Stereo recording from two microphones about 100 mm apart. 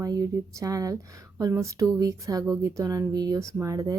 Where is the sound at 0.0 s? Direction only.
35° right (ahead or behind).